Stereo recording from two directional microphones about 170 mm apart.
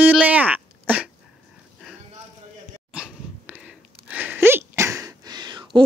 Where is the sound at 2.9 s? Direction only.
5° right (ahead or behind).